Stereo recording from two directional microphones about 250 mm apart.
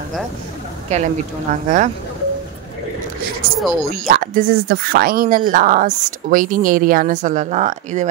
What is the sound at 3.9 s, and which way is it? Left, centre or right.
Speech, right.